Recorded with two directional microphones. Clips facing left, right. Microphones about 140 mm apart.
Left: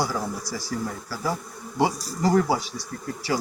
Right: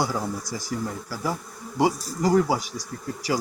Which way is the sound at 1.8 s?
10° right (ahead or behind).